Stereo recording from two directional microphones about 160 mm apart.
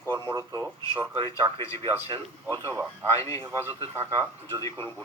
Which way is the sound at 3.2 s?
20° left (ahead or behind).